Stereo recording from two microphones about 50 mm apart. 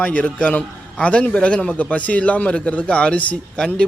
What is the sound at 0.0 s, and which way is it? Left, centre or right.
Speech, left.